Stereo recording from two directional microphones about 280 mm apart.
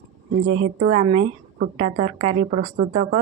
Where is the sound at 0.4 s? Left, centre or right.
Right.